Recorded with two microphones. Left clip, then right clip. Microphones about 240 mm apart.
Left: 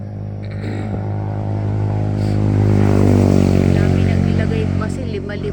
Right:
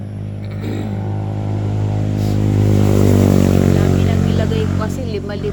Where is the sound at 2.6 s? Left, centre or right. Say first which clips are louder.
Even; right.